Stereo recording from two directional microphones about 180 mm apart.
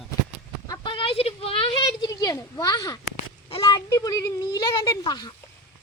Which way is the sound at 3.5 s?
25° left (ahead or behind).